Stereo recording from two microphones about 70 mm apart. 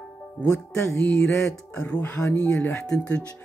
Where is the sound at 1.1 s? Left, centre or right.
Centre.